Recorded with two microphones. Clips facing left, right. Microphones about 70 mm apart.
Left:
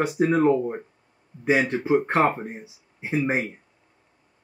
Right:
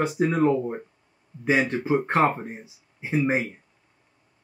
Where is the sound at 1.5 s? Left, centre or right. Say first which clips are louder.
Left 1 dB; left.